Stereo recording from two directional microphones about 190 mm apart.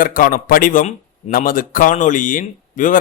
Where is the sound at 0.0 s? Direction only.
45° left (ahead or behind).